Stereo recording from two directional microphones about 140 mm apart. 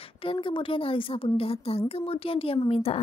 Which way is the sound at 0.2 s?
40° left (ahead or behind).